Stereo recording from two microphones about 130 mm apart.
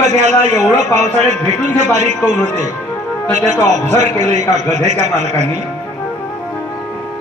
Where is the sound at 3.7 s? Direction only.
65° right (ahead or behind).